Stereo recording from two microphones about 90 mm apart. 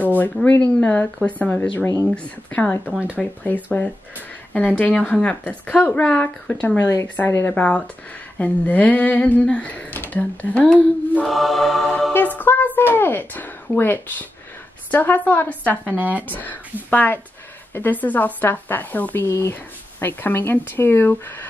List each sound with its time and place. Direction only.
0.2 s a woman's voice: 20° left (ahead or behind)
3.2 s mantra: 5° left (ahead or behind)
4.6 s speech: 20° left (ahead or behind)
6.8 s speech: 35° left (ahead or behind)
7.2 s a woman's voice: 25° left (ahead or behind)
7.5 s speech: 15° left (ahead or behind)
10.7 s mantra: 5° left (ahead or behind)
12.1 s a woman's voice: 20° left (ahead or behind)
16.0 s speech: 20° right (ahead or behind)
16.3 s a woman's voice: 20° left (ahead or behind)